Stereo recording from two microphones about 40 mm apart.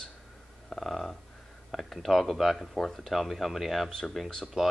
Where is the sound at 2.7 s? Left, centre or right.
Centre.